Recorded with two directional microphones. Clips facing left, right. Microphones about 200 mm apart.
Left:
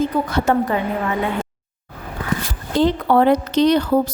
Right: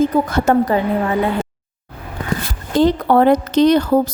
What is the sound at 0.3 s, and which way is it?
Speech, 45° right (ahead or behind).